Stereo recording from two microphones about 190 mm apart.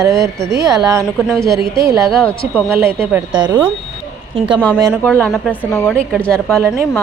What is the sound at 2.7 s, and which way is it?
Speech, 10° right (ahead or behind).